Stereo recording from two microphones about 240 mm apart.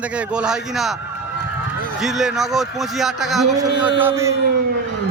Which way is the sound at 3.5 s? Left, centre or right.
Centre.